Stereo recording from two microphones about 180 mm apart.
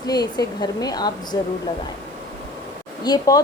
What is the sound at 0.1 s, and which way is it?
Speech, 20° left (ahead or behind).